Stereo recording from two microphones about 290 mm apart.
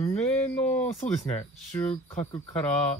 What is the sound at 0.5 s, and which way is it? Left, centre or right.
Speech, centre.